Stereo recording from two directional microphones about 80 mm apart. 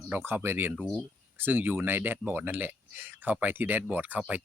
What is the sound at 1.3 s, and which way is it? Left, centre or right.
Speech, right.